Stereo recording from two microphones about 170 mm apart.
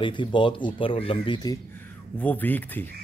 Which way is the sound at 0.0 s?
30° left (ahead or behind).